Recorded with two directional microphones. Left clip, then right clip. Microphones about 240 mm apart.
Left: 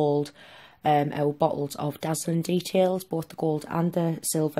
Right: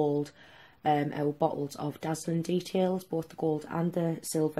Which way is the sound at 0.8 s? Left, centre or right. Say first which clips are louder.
Left 5 dB; left.